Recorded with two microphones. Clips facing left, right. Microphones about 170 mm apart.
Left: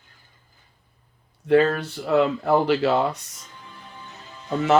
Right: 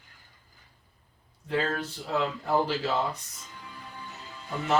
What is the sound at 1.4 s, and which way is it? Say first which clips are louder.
Speech: left 11 dB; 70° left (ahead or behind).